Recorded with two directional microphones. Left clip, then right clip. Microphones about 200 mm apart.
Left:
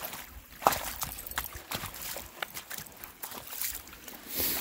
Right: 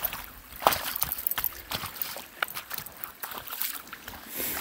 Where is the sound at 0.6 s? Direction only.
5° right (ahead or behind).